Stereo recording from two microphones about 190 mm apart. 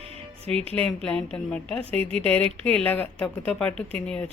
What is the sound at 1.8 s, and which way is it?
Speech, 30° right (ahead or behind).